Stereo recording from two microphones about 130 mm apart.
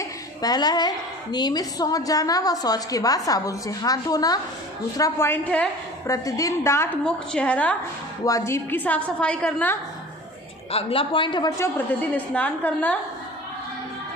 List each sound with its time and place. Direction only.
0.0 s a woman's voice: 30° left (ahead or behind); by 5.6 s 15° left (ahead or behind)
6.1 s a woman's voice: 25° left (ahead or behind)
7.0 s a woman's voice: 10° left (ahead or behind)
8.2 s a woman's voice: 25° left (ahead or behind); by 9.7 s 10° left (ahead or behind)
10.7 s a woman's voice: 50° left (ahead or behind)
11.9 s a woman's voice: 10° left (ahead or behind)